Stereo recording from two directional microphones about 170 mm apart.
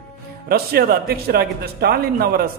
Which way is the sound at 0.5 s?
65° right (ahead or behind).